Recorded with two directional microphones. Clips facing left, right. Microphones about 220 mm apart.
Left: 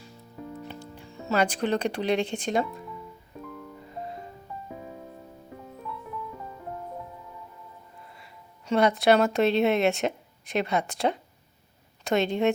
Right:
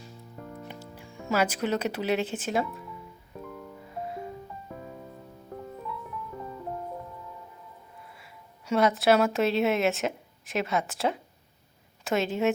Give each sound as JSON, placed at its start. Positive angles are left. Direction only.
{"t": 1.3, "sound": "speech", "side_deg": -5}
{"t": 8.1, "sound": "speech", "side_deg": -5}